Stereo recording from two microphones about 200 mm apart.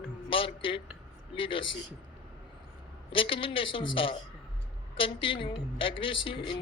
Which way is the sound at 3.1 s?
25° left (ahead or behind).